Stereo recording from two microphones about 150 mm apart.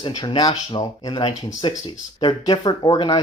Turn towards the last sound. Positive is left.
turn(degrees=30)  # may be behind; listen again after turning